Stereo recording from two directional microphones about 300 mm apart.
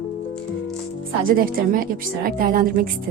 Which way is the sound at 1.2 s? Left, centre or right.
Right.